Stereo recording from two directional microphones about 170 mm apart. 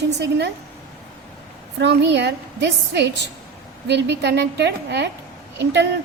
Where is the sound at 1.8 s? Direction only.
90° right.